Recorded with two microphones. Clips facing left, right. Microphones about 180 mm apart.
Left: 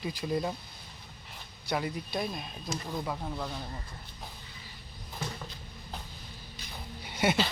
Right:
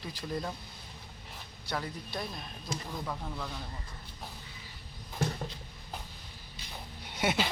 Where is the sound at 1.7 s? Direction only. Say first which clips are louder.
Left 5 dB; 15° left (ahead or behind).